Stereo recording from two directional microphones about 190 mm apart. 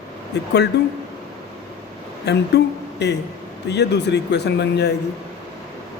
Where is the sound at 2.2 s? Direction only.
60° left (ahead or behind).